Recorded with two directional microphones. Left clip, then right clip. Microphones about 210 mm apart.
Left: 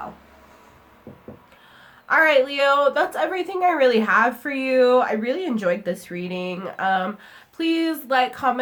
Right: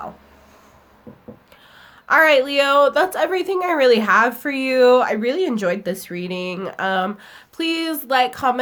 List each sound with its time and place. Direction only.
2.0 s a woman's voice: 45° right (ahead or behind)